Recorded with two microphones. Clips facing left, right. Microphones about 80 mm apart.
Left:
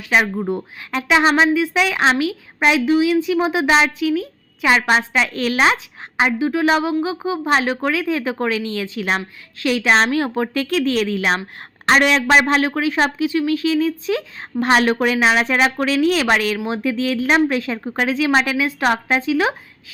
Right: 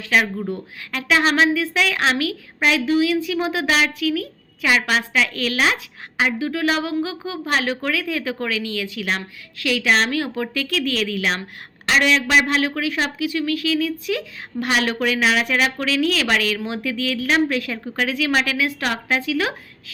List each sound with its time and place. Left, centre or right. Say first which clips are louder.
0.3 s a woman's voice: left 4 dB; left